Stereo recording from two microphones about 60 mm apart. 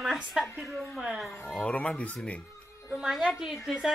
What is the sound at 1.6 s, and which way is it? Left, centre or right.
Speech, centre.